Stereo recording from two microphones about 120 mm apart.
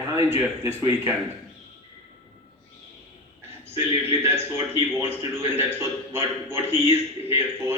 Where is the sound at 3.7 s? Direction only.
20° right (ahead or behind).